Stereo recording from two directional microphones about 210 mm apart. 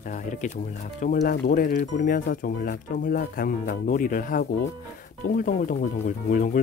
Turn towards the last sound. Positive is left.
turn(degrees=40)  # may be behind; listen again after turning